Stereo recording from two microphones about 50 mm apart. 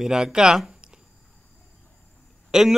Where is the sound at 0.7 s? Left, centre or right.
Centre.